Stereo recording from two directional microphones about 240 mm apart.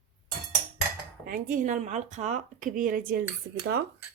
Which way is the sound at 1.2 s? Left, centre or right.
Right.